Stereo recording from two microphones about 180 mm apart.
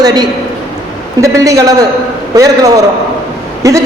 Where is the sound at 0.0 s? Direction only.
20° right (ahead or behind).